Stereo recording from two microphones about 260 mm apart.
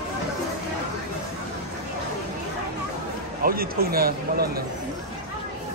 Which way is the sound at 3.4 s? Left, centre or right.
Right.